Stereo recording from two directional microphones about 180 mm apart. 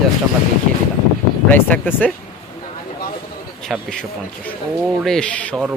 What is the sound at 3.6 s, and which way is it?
Speech, centre (ahead or behind).